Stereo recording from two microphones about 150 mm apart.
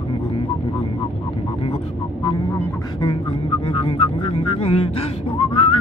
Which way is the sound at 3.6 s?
35° left (ahead or behind).